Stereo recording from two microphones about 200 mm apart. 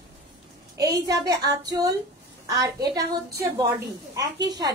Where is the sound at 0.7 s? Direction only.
15° right (ahead or behind).